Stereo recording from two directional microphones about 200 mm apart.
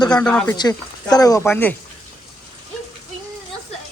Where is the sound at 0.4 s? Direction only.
20° left (ahead or behind).